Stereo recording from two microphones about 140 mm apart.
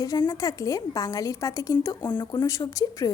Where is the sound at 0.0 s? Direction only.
25° left (ahead or behind).